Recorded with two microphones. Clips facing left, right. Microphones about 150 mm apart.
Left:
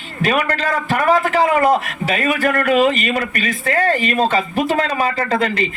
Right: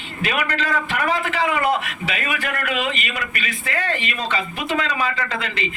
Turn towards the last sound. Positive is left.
turn(degrees=45)  # may be behind; listen again after turning